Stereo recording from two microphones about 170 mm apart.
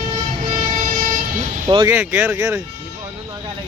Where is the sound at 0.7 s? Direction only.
50° right (ahead or behind).